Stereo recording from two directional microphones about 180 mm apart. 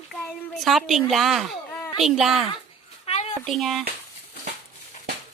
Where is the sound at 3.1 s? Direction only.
35° left (ahead or behind).